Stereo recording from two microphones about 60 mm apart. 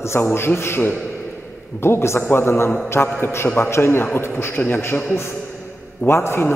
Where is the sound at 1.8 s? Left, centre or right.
Left.